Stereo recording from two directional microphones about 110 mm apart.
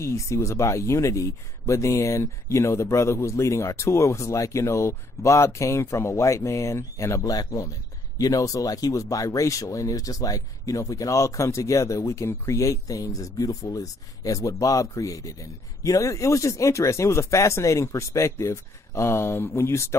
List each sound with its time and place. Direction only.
0.0 s speech: 25° left (ahead or behind)